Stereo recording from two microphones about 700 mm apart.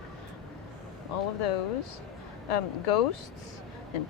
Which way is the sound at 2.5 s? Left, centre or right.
Left.